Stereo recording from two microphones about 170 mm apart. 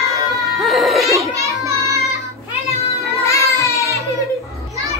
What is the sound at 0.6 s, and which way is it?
Baby cry, centre (ahead or behind).